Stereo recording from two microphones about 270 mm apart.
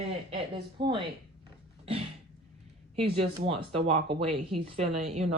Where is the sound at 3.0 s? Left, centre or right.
Centre.